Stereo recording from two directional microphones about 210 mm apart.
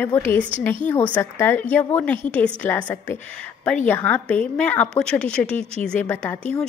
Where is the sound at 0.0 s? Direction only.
10° left (ahead or behind).